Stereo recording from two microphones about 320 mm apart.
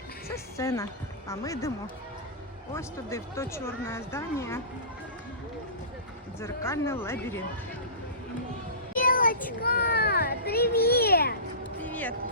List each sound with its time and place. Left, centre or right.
0.5 s speech: centre
2.7 s speech: centre
6.4 s speech: centre
9.0 s child singing: left
9.6 s a child's voice: left
11.8 s a sound: centre